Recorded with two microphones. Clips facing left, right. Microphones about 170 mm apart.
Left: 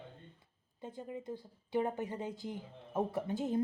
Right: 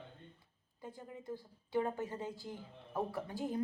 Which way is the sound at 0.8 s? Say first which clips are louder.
Left 5 dB; 20° left (ahead or behind).